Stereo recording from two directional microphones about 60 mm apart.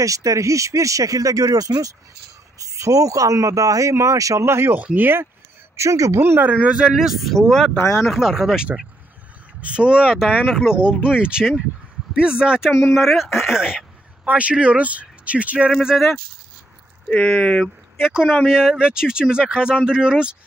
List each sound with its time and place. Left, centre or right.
0.0 s speech: right
2.6 s speech: right
3.9 s speech: right
4.5 s speech: right
4.7 s speech: right
5.8 s speech: right
6.2 s speech: right
6.9 s speech: centre
9.6 s speech: centre
12.9 s speech: centre
14.2 s speech: right
17.3 s speech: centre
18.0 s speech: centre